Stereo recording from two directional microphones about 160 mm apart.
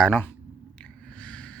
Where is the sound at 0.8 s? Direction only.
5° left (ahead or behind).